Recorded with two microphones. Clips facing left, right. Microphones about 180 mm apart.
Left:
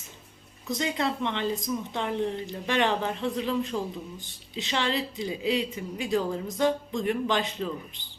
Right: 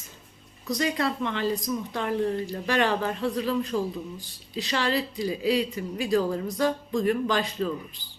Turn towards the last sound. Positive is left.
turn(degrees=20)  # may be behind; listen again after turning